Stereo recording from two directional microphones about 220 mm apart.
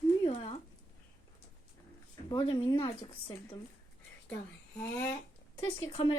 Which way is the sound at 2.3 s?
20° left (ahead or behind).